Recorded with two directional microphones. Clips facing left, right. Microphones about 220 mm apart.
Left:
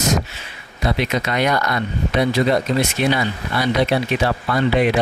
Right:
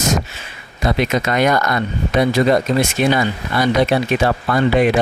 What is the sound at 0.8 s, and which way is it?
Speech, 45° right (ahead or behind).